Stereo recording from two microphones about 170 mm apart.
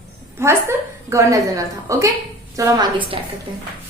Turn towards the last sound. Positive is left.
turn(degrees=-25)  # may be behind; listen again after turning